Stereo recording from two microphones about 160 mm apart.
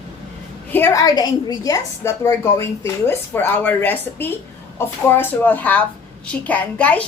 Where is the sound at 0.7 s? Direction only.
15° left (ahead or behind).